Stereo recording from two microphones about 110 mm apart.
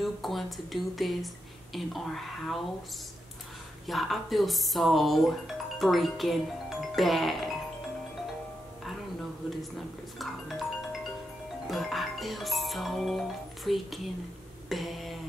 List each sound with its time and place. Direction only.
0.0 s speech: centre (ahead or behind)
3.8 s speech: centre (ahead or behind)
10.1 s music: centre (ahead or behind)
11.7 s speech: centre (ahead or behind)